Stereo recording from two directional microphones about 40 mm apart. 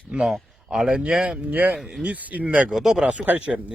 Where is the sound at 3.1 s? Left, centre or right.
Right.